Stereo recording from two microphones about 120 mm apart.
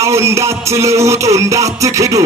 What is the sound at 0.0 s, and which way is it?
Music, 25° right (ahead or behind).